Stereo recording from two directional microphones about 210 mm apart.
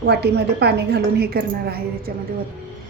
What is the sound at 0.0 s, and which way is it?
A woman's voice, 50° right (ahead or behind).